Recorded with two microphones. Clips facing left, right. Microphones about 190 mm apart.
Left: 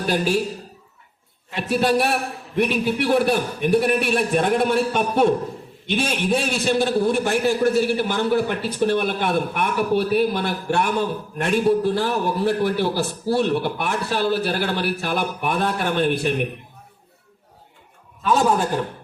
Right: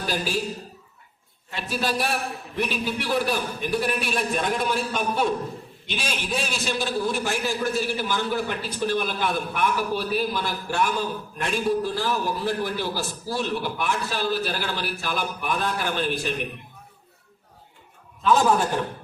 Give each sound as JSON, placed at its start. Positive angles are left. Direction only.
{"t": 0.1, "sound": "a man's voice", "side_deg": 60}
{"t": 1.5, "sound": "a man's voice", "side_deg": 60}